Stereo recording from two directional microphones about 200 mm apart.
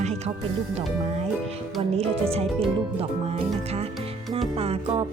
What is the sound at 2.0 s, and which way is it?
Speech, 30° right (ahead or behind).